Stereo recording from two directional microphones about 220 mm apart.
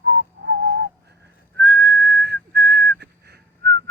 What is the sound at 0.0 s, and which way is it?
Whistling, 55° right (ahead or behind).